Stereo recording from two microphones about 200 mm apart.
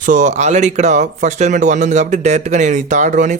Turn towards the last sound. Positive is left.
turn(degrees=-40)  # may be behind; listen again after turning